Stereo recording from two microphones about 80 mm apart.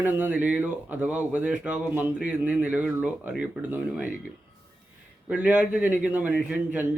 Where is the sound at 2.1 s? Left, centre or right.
Centre.